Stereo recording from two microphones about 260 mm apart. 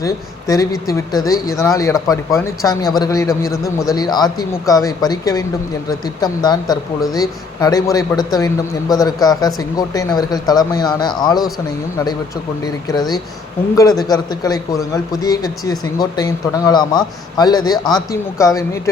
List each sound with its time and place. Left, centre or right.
0.0 s speech: centre
12.6 s speech: centre